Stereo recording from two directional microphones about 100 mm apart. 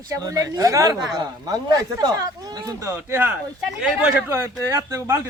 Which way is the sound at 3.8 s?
10° right (ahead or behind).